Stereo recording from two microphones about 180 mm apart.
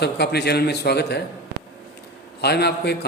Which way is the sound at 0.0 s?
65° left (ahead or behind).